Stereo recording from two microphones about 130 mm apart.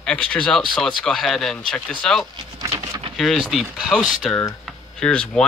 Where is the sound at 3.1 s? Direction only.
5° left (ahead or behind).